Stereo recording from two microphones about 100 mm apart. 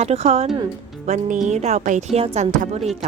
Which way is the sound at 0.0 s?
90° right.